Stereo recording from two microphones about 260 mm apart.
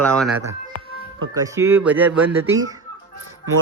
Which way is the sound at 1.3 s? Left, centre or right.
Centre.